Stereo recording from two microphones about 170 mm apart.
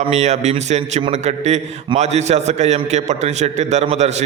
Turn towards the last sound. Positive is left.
turn(degrees=-40)  # may be behind; listen again after turning